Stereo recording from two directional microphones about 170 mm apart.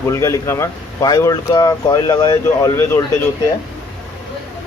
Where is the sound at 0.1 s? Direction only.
15° left (ahead or behind).